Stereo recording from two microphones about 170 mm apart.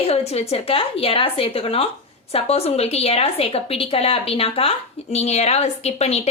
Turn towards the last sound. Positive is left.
turn(degrees=40)  # may be behind; listen again after turning